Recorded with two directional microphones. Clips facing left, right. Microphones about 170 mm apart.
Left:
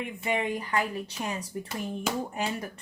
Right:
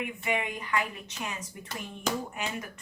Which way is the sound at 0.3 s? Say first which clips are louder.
Left 3 dB; 35° left (ahead or behind).